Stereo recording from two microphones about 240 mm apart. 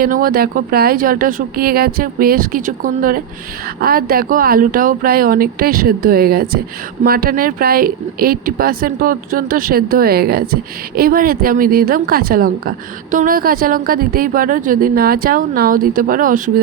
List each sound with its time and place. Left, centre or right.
0.0 s speech: right